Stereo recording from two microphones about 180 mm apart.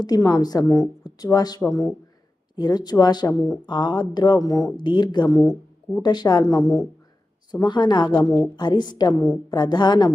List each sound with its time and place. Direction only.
0.0 s speech: 20° left (ahead or behind)